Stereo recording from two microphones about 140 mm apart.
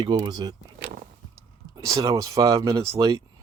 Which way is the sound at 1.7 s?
25° right (ahead or behind).